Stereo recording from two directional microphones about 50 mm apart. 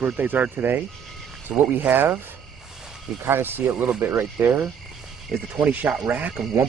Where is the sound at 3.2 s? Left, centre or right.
Right.